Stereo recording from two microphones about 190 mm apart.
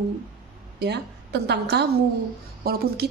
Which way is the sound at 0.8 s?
60° right (ahead or behind).